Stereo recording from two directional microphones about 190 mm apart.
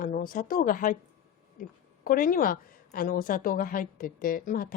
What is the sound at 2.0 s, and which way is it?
Speech, 50° left (ahead or behind).